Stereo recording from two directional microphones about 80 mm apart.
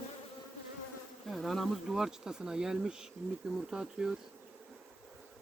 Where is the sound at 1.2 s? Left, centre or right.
Centre.